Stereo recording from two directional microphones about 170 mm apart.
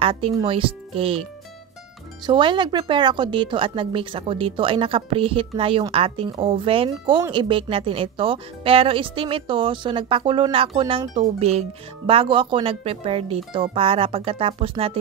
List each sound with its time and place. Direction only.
0.0 s speech: 30° right (ahead or behind)
2.2 s speech: 30° right (ahead or behind)